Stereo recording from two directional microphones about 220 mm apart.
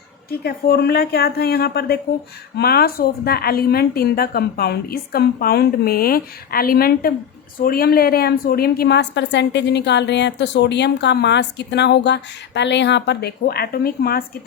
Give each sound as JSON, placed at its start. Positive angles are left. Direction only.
{"t": 0.3, "sound": "a woman's voice", "side_deg": 45}